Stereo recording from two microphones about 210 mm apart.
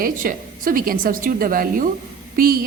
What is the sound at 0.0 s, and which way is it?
A woman's voice, 40° right (ahead or behind).